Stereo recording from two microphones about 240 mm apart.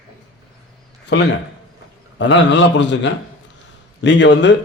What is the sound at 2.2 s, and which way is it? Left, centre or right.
A man's voice, left.